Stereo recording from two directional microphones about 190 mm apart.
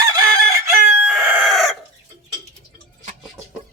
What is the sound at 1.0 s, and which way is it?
Chicken, centre (ahead or behind).